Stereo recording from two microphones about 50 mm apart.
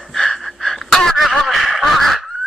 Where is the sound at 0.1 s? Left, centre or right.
Centre.